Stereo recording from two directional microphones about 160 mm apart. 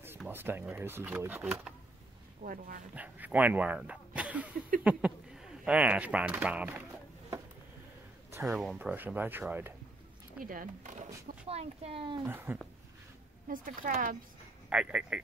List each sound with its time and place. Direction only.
0.3 s speech: 15° right (ahead or behind)
2.4 s speech: 60° right (ahead or behind)
3.0 s speech: 10° right (ahead or behind)
8.5 s speech: centre (ahead or behind)
8.7 s speech: 10° right (ahead or behind)
10.4 s speech: 60° right (ahead or behind)
11.4 s speech: 40° right (ahead or behind)
12.3 s speech: 10° right (ahead or behind)
13.5 s speech: 60° right (ahead or behind)
14.7 s speech: 5° right (ahead or behind)